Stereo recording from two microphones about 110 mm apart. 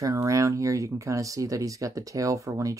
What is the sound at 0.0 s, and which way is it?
Speech, 30° right (ahead or behind).